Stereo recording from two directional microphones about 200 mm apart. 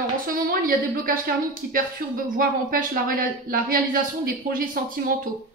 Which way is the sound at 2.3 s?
45° right (ahead or behind).